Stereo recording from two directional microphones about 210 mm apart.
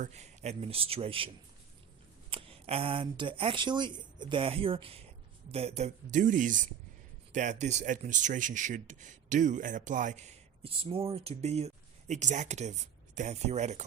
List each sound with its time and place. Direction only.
0.0 s speech: 30° right (ahead or behind)
2.3 s speech: 25° right (ahead or behind)